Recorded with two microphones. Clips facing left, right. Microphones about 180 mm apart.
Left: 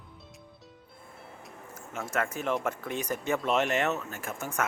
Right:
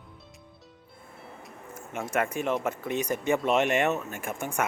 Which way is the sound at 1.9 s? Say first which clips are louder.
Right 3 dB; 15° right (ahead or behind).